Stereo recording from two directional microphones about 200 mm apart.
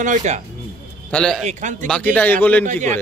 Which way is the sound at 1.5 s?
35° right (ahead or behind).